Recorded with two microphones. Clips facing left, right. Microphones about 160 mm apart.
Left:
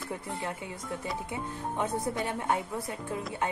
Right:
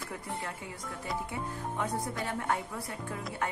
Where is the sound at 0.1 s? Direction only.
20° left (ahead or behind).